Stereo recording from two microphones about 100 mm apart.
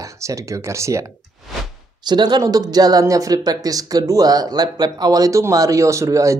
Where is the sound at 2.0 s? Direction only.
45° right (ahead or behind).